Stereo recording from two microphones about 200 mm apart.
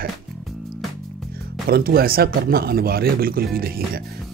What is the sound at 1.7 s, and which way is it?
Speech, 50° right (ahead or behind).